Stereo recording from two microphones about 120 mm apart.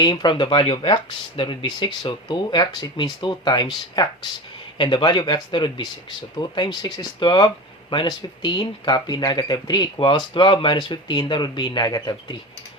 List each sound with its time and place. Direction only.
0.0 s speech: 40° left (ahead or behind)